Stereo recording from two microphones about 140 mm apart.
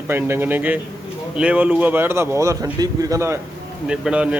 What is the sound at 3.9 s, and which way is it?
Speech, 5° right (ahead or behind).